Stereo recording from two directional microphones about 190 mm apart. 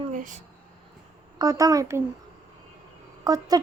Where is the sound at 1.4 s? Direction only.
20° right (ahead or behind).